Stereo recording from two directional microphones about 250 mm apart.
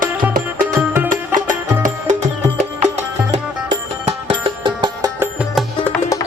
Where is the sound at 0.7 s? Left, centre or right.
Centre.